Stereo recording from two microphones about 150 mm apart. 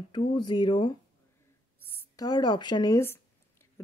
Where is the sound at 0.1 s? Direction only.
30° left (ahead or behind).